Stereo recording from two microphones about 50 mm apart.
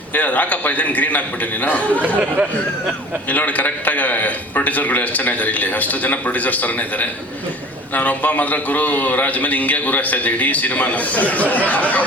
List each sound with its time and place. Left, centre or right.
0.1 s a man's voice: left
3.2 s a man's voice: left